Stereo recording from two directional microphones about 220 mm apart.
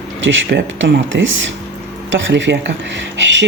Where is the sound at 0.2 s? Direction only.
60° right (ahead or behind).